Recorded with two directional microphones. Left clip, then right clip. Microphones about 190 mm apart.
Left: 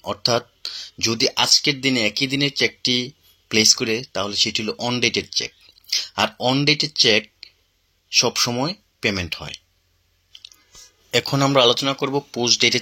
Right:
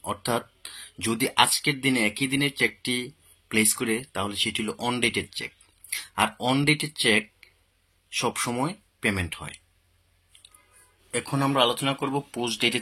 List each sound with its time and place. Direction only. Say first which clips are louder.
0.0 s speech: left 7 dB; 15° left (ahead or behind)
11.1 s speech: left 8 dB; 35° left (ahead or behind)